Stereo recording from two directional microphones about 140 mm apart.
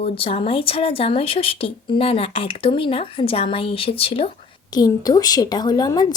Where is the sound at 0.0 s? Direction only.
45° left (ahead or behind).